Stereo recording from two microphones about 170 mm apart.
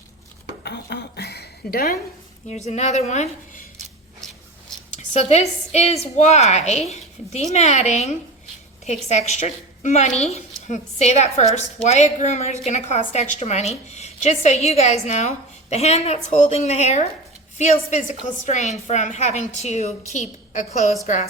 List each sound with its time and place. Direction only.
0.6 s dishes: 80° left; by 2.0 s 65° left (ahead or behind)
2.5 s a woman's voice: 40° left (ahead or behind)
4.9 s a woman's voice: 40° left (ahead or behind)